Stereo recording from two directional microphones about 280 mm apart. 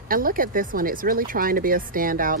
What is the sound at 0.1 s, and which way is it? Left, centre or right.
Speech, right.